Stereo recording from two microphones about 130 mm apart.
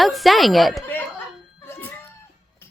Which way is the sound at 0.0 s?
Centre (ahead or behind).